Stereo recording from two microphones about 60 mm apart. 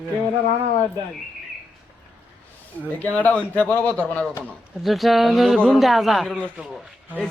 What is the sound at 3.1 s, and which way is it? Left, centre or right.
Speech, left.